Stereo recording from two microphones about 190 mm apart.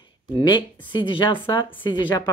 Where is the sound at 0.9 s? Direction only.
25° left (ahead or behind).